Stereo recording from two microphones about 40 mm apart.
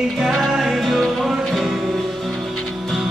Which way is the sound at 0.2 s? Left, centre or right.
Centre.